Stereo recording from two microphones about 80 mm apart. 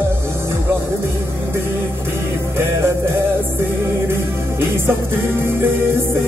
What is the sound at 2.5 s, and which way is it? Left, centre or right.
Music, right.